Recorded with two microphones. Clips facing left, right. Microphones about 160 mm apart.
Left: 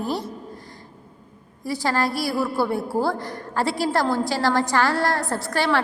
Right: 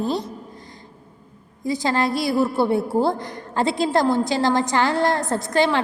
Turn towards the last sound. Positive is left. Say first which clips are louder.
# right 3 dB
turn(degrees=-20)  # may be behind; listen again after turning